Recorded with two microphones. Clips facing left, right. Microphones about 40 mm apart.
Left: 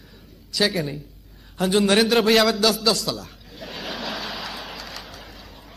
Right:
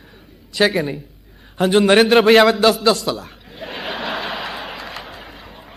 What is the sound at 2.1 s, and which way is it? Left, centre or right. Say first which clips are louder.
Chuckle: right 6 dB; right.